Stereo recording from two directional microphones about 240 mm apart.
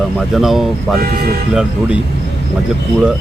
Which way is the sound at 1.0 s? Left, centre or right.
Right.